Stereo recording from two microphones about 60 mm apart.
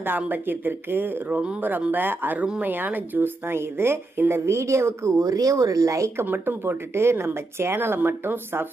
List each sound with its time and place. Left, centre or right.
0.3 s a woman's voice: right
5.2 s speech: right
6.2 s speech: right